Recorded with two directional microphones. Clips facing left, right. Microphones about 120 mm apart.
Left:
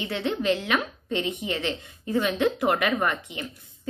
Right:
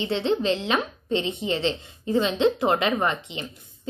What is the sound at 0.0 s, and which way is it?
A woman's voice, 25° right (ahead or behind).